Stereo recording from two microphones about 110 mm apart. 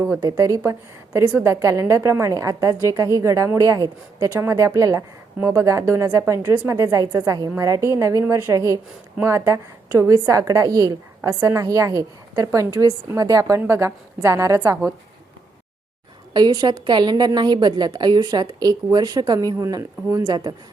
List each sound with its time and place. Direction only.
0.2 s a woman's voice: 30° right (ahead or behind)
16.3 s a woman's voice: 40° right (ahead or behind)